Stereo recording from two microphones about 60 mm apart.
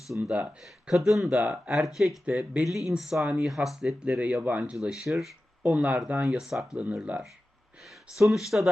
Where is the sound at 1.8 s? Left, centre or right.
Centre.